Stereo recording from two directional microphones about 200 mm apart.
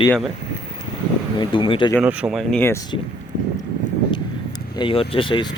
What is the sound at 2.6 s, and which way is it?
Speech, 15° left (ahead or behind).